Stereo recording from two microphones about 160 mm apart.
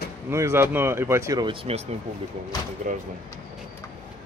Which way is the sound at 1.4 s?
35° right (ahead or behind).